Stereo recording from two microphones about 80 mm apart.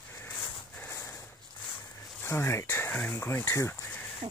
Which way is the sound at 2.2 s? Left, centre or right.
Left.